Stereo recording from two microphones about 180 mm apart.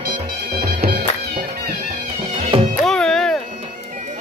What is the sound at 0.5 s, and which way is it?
Music, 60° right (ahead or behind).